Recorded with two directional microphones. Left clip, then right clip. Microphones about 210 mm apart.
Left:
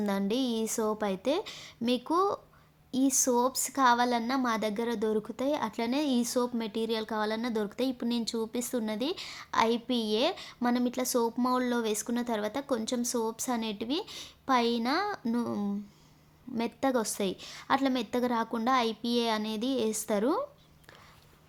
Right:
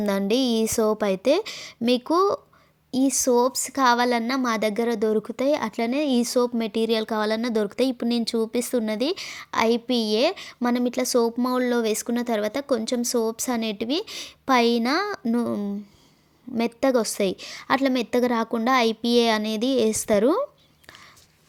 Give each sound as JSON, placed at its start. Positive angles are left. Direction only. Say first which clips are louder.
{"t": 0.0, "sound": "a woman's voice", "louder": "right 8 dB", "side_deg": -35}